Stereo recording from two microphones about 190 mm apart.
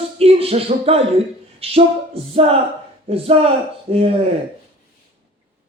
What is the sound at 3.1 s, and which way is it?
Speech, 30° right (ahead or behind).